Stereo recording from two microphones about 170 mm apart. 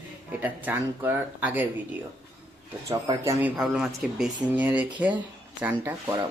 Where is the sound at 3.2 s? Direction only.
15° right (ahead or behind).